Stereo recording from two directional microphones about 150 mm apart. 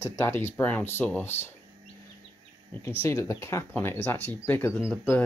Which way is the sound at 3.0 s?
20° left (ahead or behind).